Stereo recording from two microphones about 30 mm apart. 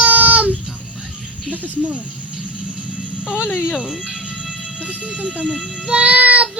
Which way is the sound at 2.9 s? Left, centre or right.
Right.